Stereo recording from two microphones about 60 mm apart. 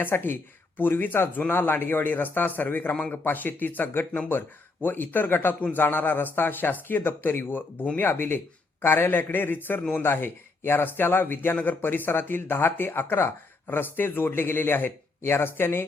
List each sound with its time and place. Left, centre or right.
0.0 s speech: left